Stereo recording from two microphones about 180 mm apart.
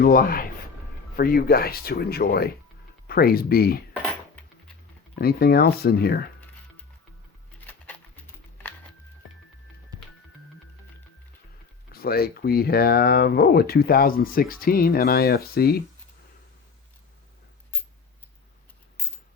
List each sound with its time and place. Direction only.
0.0 s speech: 55° left (ahead or behind)
5.1 s speech: 60° left (ahead or behind)
7.7 s a sound: 10° left (ahead or behind)
11.9 s speech: 60° left (ahead or behind)